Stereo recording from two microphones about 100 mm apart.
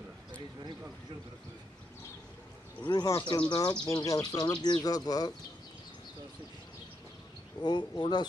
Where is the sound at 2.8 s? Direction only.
40° left (ahead or behind).